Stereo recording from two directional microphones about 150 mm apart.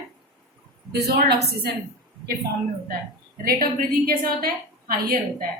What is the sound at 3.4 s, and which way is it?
A woman's voice, 85° right.